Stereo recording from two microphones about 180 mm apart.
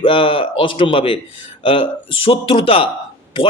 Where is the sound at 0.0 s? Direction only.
30° left (ahead or behind).